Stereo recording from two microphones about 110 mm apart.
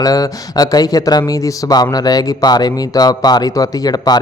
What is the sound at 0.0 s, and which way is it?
Speech, 35° left (ahead or behind).